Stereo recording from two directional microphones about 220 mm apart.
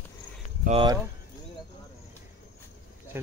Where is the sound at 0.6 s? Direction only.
25° right (ahead or behind).